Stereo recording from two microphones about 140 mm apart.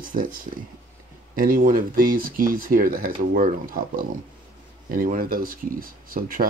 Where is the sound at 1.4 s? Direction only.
85° right.